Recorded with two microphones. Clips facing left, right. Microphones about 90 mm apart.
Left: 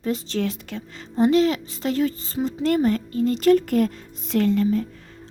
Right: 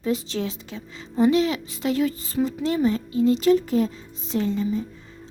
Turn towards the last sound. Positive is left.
turn(degrees=75)  # may be behind; listen again after turning